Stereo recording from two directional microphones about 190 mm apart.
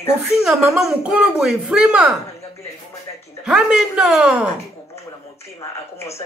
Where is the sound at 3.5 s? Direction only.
5° right (ahead or behind).